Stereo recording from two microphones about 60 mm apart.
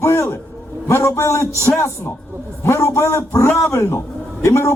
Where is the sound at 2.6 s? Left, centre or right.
Left.